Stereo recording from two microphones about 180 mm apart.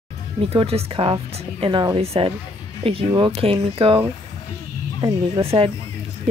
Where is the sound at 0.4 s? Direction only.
30° right (ahead or behind).